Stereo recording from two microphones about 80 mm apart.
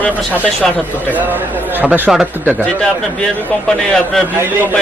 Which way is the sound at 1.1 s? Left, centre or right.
Right.